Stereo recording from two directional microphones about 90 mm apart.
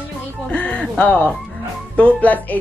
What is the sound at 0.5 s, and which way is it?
Music, 15° left (ahead or behind).